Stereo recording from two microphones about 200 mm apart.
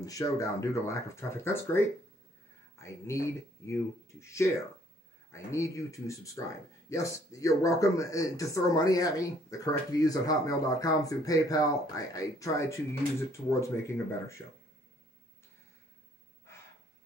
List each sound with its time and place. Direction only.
0.0 s speech: 15° left (ahead or behind)